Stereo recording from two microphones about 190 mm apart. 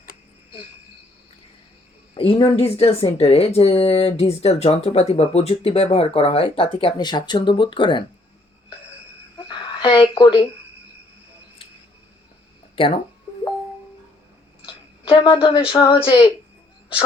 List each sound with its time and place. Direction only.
2.1 s a woman's voice: 30° left (ahead or behind)
9.5 s a sound: 30° left (ahead or behind)
12.7 s speech: 30° left (ahead or behind)
15.0 s speech: 30° left (ahead or behind)